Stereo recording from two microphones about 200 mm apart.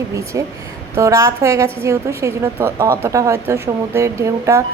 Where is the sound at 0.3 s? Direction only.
15° right (ahead or behind).